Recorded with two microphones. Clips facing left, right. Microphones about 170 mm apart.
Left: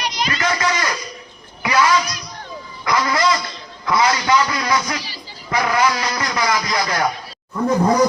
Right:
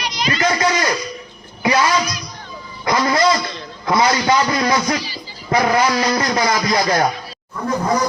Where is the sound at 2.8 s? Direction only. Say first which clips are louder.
Right 2 dB; 30° right (ahead or behind).